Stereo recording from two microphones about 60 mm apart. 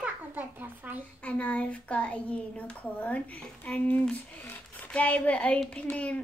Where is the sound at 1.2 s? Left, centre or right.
Left.